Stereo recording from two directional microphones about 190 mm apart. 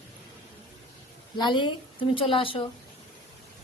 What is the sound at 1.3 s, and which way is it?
Speech, 25° left (ahead or behind).